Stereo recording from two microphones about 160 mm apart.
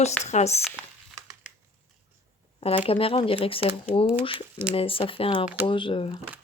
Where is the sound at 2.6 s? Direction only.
35° left (ahead or behind).